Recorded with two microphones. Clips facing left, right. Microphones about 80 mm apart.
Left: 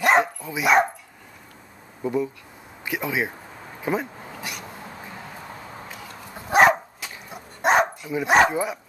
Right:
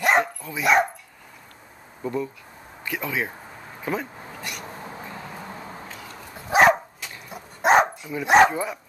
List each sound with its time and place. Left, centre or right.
0.2 s speech: centre
2.0 s speech: centre
4.3 s a sound: centre
6.5 s dog: centre
8.2 s speech: centre
8.5 s speech: centre